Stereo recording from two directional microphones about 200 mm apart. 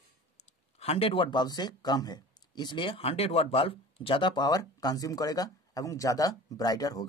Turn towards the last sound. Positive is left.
turn(degrees=20)  # may be behind; listen again after turning